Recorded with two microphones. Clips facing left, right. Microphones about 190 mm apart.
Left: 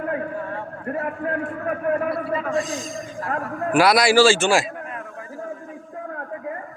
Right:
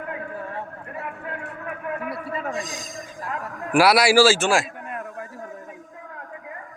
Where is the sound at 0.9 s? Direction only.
45° left (ahead or behind).